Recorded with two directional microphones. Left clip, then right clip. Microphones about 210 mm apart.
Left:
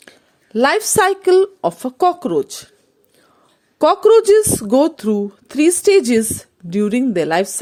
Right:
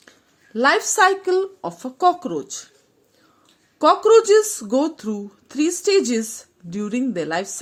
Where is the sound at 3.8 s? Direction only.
35° left (ahead or behind).